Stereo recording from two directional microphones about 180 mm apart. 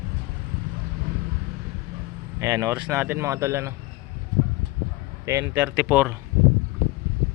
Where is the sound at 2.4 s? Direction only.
15° right (ahead or behind).